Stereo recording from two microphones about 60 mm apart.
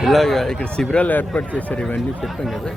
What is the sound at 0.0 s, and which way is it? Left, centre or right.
Speech, centre.